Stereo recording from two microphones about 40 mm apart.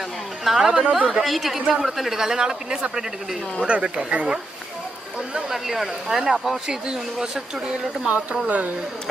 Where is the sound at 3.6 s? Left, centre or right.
Right.